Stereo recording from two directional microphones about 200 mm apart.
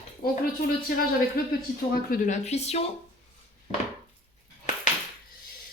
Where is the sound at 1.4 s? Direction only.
50° left (ahead or behind).